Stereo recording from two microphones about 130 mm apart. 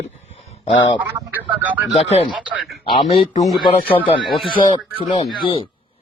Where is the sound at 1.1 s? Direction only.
15° right (ahead or behind).